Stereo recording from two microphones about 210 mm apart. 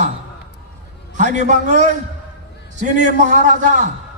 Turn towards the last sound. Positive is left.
turn(degrees=-35)  # may be behind; listen again after turning